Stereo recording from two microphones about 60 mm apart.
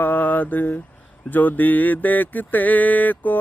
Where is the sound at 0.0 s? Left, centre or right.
Left.